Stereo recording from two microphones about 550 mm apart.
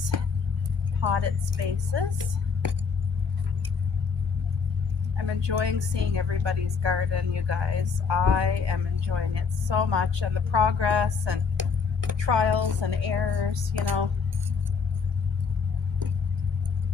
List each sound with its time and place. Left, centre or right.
1.0 s speech: right
5.1 s speech: right